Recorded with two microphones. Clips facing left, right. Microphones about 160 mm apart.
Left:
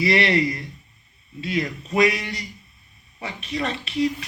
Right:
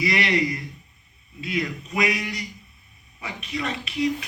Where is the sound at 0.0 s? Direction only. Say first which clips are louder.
Left 3 dB; 30° left (ahead or behind).